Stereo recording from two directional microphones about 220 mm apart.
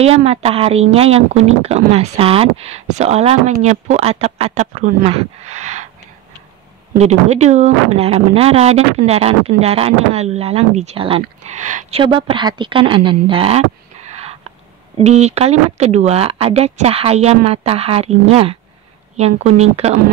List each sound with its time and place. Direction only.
0.0 s speech: 30° right (ahead or behind)
7.0 s speech: 30° right (ahead or behind)
14.1 s a sound: 25° right (ahead or behind)
15.0 s speech: 30° right (ahead or behind)